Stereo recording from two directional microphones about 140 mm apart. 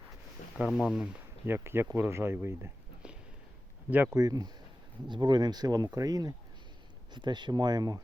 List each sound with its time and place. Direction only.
0.5 s speech: 5° right (ahead or behind)
4.2 s speech: 25° right (ahead or behind)